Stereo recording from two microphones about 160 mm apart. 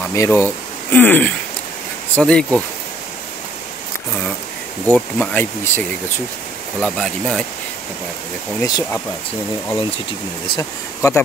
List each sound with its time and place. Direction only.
0.1 s speech: 15° left (ahead or behind)
4.8 s speech: 10° left (ahead or behind)
8.5 s speech: 25° left (ahead or behind)
10.5 s speech: 20° left (ahead or behind)